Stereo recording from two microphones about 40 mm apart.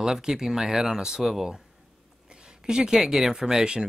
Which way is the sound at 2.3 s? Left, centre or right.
Centre.